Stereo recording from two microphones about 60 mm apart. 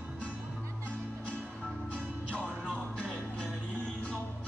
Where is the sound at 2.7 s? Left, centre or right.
Centre.